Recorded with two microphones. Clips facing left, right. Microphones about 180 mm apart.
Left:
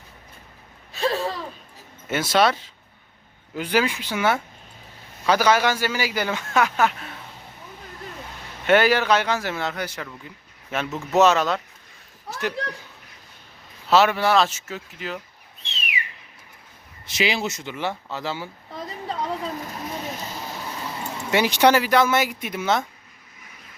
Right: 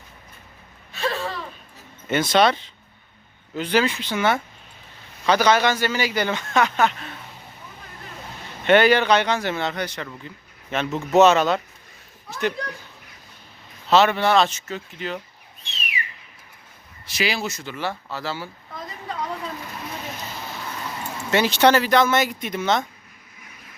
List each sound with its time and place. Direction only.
2.0 s speech: 5° left (ahead or behind)
8.6 s speech: 5° left (ahead or behind)
13.9 s speech: 5° left (ahead or behind)
17.1 s speech: 20° left (ahead or behind)
18.7 s a sound: 30° left (ahead or behind)
21.2 s speech: 15° left (ahead or behind)